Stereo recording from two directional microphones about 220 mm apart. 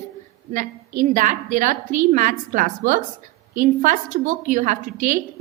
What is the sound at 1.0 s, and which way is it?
A woman's voice, 35° right (ahead or behind).